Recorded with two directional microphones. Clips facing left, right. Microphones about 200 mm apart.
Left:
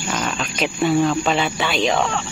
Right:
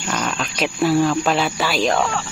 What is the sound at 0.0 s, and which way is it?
Speech, 5° left (ahead or behind).